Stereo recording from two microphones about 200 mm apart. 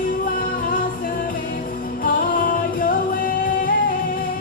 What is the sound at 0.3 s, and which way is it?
Music, 45° left (ahead or behind).